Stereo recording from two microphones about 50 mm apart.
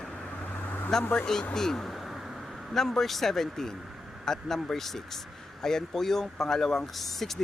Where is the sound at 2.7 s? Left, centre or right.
Centre.